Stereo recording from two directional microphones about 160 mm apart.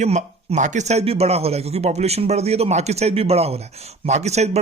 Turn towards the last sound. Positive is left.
turn(degrees=-45)  # may be behind; listen again after turning